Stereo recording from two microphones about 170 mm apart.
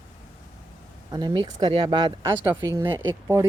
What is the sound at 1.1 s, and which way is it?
Speech, 25° right (ahead or behind).